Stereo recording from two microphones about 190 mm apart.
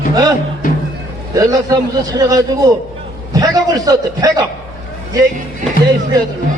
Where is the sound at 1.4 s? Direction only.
20° right (ahead or behind).